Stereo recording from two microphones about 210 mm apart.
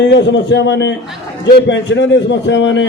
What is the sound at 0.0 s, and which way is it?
A man's voice, 55° left (ahead or behind).